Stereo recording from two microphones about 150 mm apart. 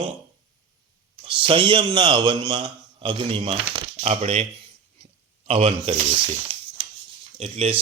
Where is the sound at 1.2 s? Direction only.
35° right (ahead or behind).